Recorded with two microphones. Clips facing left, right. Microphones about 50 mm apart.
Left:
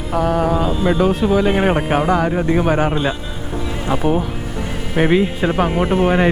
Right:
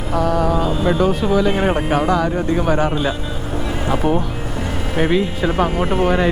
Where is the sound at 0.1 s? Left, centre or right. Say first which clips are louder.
Left 1 dB; left.